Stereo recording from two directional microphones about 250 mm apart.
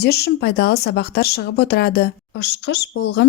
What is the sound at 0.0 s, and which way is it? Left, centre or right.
Speech, left.